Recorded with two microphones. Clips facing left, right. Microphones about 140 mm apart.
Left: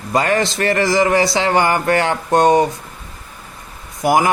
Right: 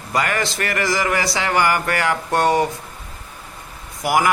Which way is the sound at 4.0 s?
25° left (ahead or behind).